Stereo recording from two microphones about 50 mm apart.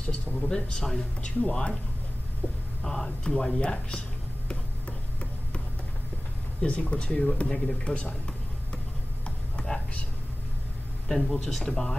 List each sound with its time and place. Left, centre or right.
0.0 s speech: left
2.8 s speech: centre
6.6 s speech: left
9.2 s a sound: left
11.1 s speech: centre
11.3 s speech: centre